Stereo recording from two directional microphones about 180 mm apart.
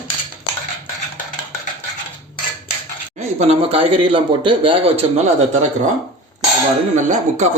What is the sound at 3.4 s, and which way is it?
A man's voice, 35° right (ahead or behind).